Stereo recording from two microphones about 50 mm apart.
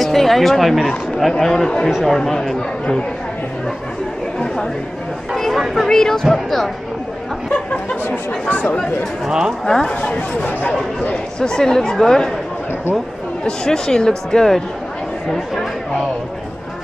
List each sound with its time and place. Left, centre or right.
0.0 s speech: centre
5.3 s speech: centre
8.5 s speech: left
9.7 s speech: centre
10.0 s speech: left
10.7 s speech: centre
13.5 s speech: centre